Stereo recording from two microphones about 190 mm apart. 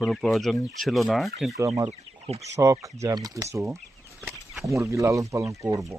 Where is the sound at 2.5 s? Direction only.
15° right (ahead or behind).